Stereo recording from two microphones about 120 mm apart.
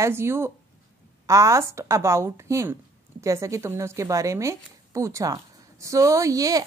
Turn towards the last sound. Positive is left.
turn(degrees=-30)  # may be behind; listen again after turning